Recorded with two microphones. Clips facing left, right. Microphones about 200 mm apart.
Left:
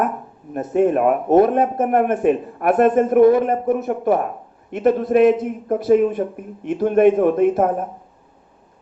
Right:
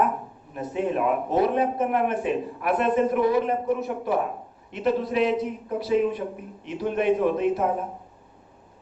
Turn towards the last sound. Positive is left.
turn(degrees=50)  # may be behind; listen again after turning